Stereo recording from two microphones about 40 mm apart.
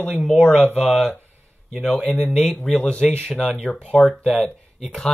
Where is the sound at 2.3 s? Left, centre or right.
Centre.